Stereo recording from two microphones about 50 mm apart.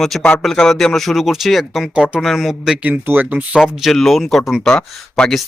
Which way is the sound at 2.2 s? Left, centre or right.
Centre.